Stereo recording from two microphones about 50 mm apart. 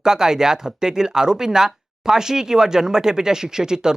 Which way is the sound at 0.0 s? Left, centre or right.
Centre.